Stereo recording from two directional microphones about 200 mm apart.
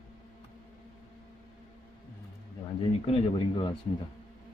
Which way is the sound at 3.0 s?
25° left (ahead or behind).